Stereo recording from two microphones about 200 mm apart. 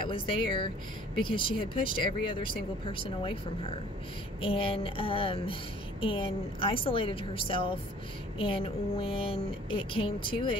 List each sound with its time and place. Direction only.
0.0 s speech: 25° left (ahead or behind)
4.4 s speech: 25° left (ahead or behind)